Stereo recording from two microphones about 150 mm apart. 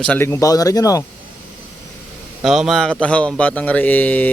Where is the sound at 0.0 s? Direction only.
10° left (ahead or behind).